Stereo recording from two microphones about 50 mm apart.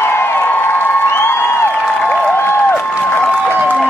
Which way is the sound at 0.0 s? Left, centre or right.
Left.